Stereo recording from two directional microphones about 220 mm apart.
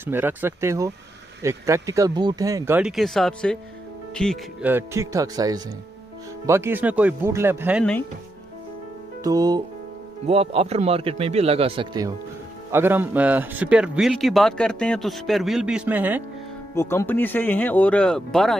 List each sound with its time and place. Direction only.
0.0 s speech: 10° right (ahead or behind)
4.6 s speech: 10° right (ahead or behind)
9.2 s speech: 15° right (ahead or behind)
12.7 s a man's voice: 10° right (ahead or behind)
16.7 s speech: 10° left (ahead or behind)